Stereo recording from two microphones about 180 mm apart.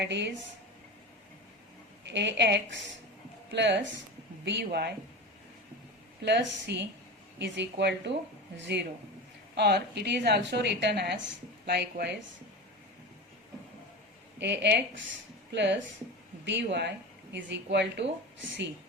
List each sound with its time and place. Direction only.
0.0 s a woman's voice: 75° right (ahead or behind)
2.0 s a woman's voice: 75° right (ahead or behind)
4.4 s a woman's voice: 70° right (ahead or behind)
6.2 s a woman's voice: 70° right (ahead or behind)
9.6 s a woman's voice: 65° right (ahead or behind)
14.3 s a woman's voice: 75° right (ahead or behind)